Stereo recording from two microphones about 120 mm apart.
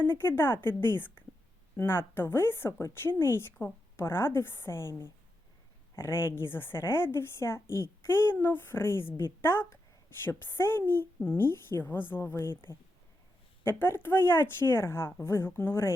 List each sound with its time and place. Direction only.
0.0 s a woman's voice: 20° left (ahead or behind)
4.9 s speech: 30° right (ahead or behind)
6.0 s a woman's voice: 20° left (ahead or behind)
13.7 s a woman's voice: 20° left (ahead or behind)